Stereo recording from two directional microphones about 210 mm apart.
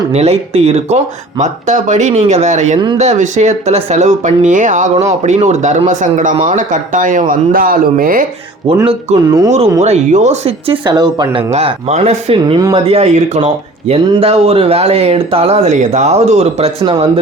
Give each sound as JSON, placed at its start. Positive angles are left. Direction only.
{"t": 0.1, "sound": "speech", "side_deg": -30}
{"t": 8.6, "sound": "speech", "side_deg": -25}
{"t": 9.8, "sound": "speech", "side_deg": -35}